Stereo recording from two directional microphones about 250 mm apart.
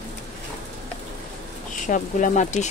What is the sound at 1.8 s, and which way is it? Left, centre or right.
Speech, left.